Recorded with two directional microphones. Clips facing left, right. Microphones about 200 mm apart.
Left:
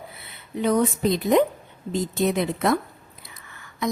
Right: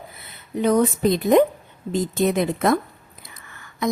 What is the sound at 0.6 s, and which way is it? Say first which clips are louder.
A woman's voice: right 3 dB; 45° right (ahead or behind).